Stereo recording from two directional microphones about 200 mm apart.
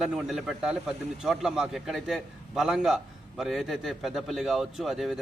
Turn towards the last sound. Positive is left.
turn(degrees=0)  # may be behind; listen again after turning